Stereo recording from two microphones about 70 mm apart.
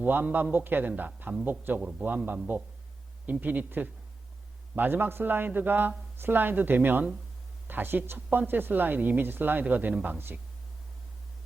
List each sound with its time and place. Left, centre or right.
0.0 s speech: right
1.8 s a man's voice: centre
2.0 s speech: right
3.4 s a man's voice: right